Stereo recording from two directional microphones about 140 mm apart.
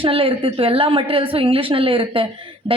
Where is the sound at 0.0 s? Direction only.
40° right (ahead or behind).